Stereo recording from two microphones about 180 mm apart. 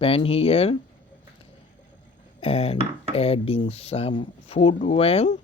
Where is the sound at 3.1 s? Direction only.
35° left (ahead or behind).